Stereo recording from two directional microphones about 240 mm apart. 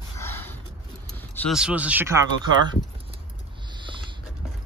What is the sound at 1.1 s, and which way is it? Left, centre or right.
Vehicle, centre.